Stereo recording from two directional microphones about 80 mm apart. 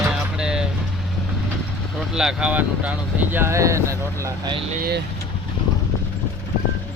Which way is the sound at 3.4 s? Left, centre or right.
Right.